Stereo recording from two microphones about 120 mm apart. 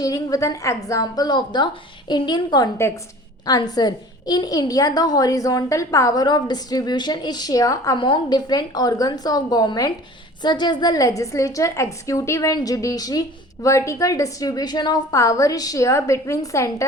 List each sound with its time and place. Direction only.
0.0 s a woman's voice: 30° left (ahead or behind)
2.7 s a woman's voice: 20° left (ahead or behind)
3.4 s a woman's voice: 30° left (ahead or behind)
7.9 s a woman's voice: 40° left (ahead or behind); by 16.8 s 25° left (ahead or behind)